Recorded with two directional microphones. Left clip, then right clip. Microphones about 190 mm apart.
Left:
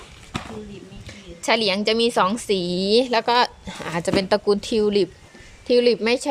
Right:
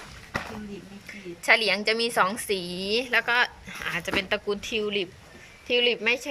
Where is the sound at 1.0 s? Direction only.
15° left (ahead or behind).